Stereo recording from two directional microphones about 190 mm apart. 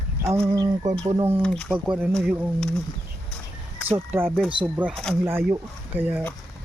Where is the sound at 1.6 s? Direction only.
5° right (ahead or behind).